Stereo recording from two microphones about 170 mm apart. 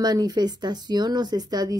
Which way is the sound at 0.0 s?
25° right (ahead or behind).